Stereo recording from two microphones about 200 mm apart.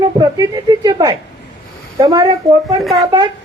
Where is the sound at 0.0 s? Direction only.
20° right (ahead or behind).